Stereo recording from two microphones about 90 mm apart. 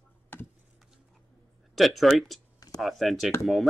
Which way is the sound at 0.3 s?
25° left (ahead or behind).